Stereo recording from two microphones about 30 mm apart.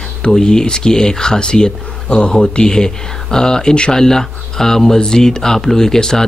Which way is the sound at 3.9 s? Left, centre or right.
Centre.